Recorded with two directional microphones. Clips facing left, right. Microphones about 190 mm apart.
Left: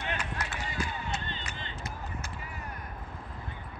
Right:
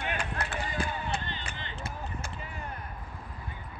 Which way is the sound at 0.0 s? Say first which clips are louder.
Right 2 dB; 55° right (ahead or behind).